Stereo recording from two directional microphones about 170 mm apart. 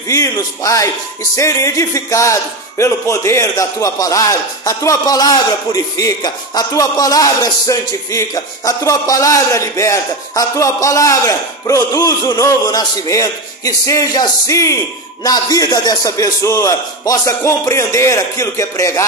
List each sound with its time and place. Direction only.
0.1 s a man's voice: 20° left (ahead or behind)
1.3 s music: 20° left (ahead or behind)
2.8 s a man's voice: 15° left (ahead or behind)